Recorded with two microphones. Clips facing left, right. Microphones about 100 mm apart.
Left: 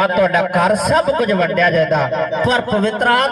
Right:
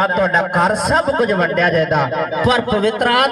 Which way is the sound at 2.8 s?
65° right (ahead or behind).